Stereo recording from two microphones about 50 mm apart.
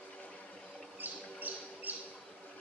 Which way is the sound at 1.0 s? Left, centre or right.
Right.